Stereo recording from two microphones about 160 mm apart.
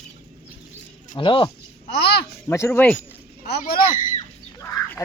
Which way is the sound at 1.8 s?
90° left.